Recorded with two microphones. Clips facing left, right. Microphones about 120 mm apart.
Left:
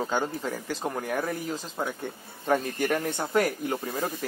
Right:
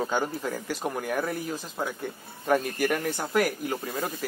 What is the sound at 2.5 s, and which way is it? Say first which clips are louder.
Speech: right 1 dB; 25° left (ahead or behind).